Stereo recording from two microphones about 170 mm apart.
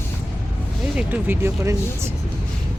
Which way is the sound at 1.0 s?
10° right (ahead or behind).